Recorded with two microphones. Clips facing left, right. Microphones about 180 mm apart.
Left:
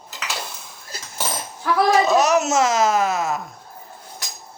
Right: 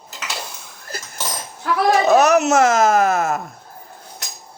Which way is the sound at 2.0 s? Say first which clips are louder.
Right 4 dB; 60° right (ahead or behind).